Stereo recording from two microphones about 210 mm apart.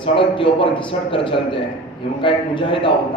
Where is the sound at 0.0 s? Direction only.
25° left (ahead or behind).